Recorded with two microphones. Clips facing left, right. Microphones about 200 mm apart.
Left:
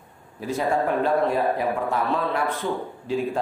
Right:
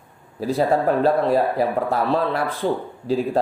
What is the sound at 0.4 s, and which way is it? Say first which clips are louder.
Speech: right 4 dB; 35° right (ahead or behind).